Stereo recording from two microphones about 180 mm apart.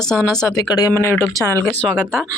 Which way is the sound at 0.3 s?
20° left (ahead or behind).